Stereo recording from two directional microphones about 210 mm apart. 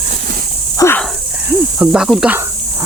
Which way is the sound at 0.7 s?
10° left (ahead or behind).